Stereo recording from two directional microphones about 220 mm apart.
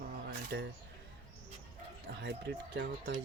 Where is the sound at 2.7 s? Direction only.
50° right (ahead or behind).